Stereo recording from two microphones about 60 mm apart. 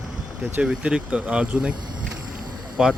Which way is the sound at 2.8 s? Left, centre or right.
Centre.